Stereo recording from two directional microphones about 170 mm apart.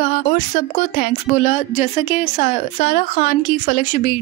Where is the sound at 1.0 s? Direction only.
45° left (ahead or behind).